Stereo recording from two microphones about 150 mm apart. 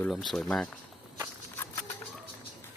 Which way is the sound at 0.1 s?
Centre (ahead or behind).